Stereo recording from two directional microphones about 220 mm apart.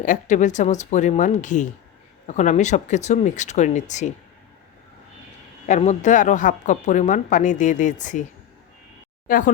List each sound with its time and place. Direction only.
0.0 s a woman's voice: 35° left (ahead or behind)
5.6 s a woman's voice: 30° left (ahead or behind)
9.2 s speech: 40° left (ahead or behind)